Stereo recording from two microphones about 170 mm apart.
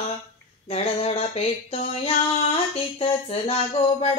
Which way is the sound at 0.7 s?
40° left (ahead or behind).